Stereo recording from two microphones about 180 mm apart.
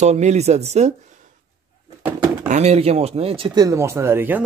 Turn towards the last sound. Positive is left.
turn(degrees=-10)  # may be behind; listen again after turning